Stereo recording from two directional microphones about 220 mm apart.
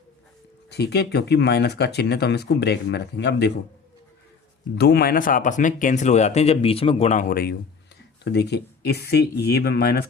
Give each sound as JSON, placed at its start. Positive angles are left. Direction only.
{"t": 0.7, "sound": "speech", "side_deg": 50}
{"t": 4.8, "sound": "speech", "side_deg": 45}